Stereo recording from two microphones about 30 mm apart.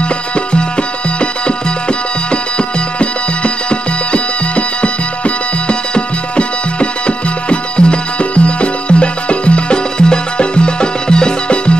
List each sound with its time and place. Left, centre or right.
2.5 s music: left